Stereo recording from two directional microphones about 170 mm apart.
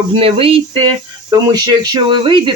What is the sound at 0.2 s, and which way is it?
Speech, 35° right (ahead or behind).